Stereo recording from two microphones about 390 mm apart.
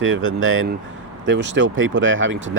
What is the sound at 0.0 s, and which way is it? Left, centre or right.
Speech, right.